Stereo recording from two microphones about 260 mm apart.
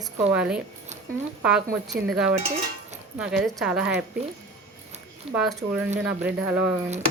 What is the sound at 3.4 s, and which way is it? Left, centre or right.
Speech, centre.